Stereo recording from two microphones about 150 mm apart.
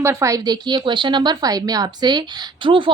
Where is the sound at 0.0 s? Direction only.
20° right (ahead or behind).